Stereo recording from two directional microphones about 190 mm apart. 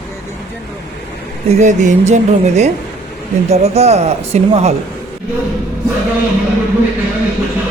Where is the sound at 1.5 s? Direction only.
35° right (ahead or behind).